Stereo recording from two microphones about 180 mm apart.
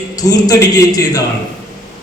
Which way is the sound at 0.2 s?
20° left (ahead or behind).